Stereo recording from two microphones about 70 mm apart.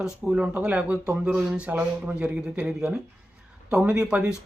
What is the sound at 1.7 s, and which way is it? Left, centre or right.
Speech, right.